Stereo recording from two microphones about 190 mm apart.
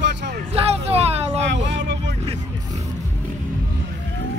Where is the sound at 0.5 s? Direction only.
35° right (ahead or behind).